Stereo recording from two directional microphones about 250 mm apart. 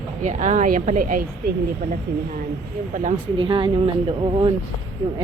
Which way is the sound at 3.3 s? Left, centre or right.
Right.